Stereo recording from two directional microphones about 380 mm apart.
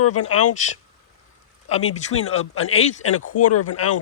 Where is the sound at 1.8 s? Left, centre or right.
Left.